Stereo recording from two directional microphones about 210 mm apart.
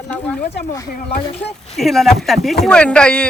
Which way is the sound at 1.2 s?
30° left (ahead or behind).